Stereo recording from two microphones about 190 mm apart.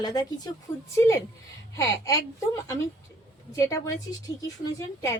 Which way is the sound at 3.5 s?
20° left (ahead or behind).